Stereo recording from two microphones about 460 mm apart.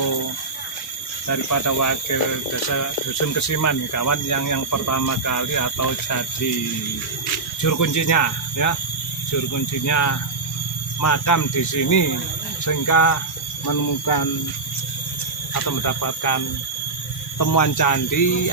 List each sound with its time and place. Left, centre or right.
1.3 s speech: left
7.6 s speech: left
15.5 s speech: left